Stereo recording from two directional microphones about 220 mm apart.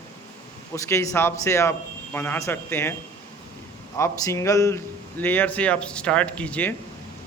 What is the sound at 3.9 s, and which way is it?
Speech, 10° left (ahead or behind).